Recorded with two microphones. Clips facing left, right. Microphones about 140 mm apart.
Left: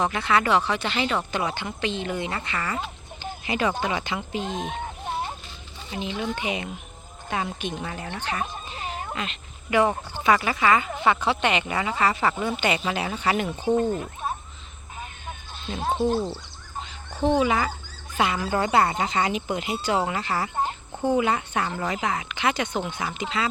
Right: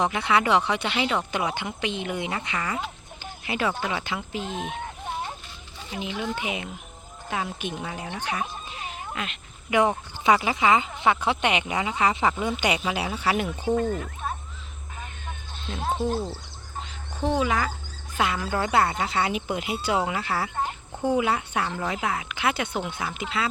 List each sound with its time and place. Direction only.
0.0 s speech: 15° right (ahead or behind)
5.9 s speech: 5° right (ahead or behind)
9.7 s speech: 15° right (ahead or behind)
13.5 s speech: 15° left (ahead or behind)
15.6 s speech: centre (ahead or behind)
17.2 s speech: centre (ahead or behind)